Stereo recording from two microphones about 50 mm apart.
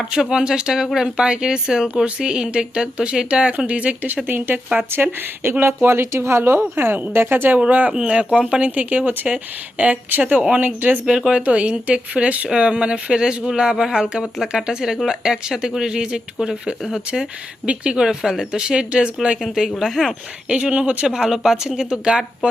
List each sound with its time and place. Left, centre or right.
0.1 s speech: centre; by 4.3 s right
4.3 s speech: right
7.7 s speech: right
7.9 s speech: right
11.0 s speech: centre
18.0 s speech: centre
19.4 s speech: centre
20.5 s speech: right